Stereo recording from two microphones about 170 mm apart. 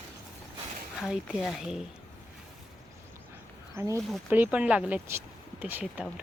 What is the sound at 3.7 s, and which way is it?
Speech, 15° right (ahead or behind).